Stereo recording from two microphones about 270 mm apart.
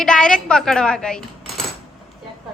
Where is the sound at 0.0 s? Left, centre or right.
Centre.